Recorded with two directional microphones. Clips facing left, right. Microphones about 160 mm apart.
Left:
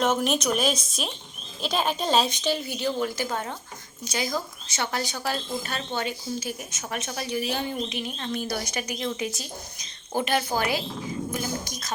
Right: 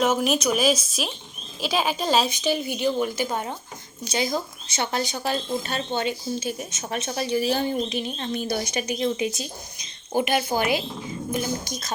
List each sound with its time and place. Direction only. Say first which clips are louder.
0.0 s a woman's voice: right 2 dB; 5° right (ahead or behind); by 11.9 s 25° right (ahead or behind)